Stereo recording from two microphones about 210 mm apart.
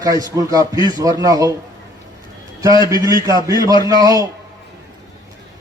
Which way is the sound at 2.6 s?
15° right (ahead or behind).